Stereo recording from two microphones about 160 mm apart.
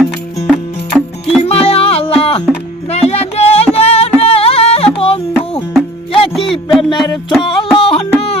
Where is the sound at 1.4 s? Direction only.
40° left (ahead or behind).